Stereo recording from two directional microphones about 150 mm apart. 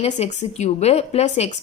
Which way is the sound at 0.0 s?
45° left (ahead or behind).